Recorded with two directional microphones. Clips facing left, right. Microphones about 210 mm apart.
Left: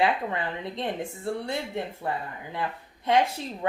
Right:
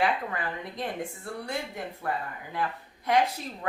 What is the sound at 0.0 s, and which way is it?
Speech, 25° left (ahead or behind).